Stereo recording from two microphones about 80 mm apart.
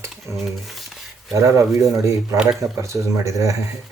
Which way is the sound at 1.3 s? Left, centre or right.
Right.